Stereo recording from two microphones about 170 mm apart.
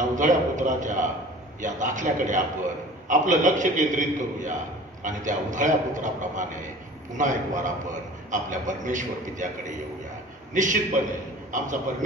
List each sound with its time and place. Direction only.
0.1 s a man's voice: 45° right (ahead or behind)